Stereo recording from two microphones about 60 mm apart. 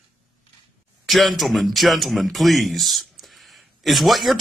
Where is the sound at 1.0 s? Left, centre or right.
Centre.